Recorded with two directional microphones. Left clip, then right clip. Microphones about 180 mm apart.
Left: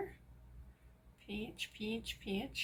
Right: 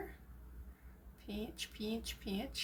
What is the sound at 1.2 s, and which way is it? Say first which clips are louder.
Speech: left 1 dB; 35° right (ahead or behind).